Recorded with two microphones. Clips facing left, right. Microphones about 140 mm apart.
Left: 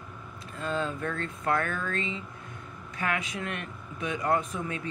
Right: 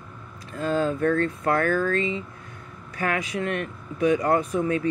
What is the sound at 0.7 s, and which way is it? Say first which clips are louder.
Speech: right 9 dB; 35° right (ahead or behind).